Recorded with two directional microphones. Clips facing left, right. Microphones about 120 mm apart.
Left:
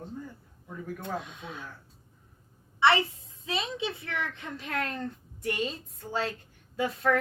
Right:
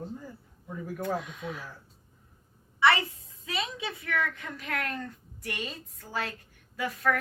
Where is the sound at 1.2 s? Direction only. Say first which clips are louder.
Right 4 dB; 25° left (ahead or behind).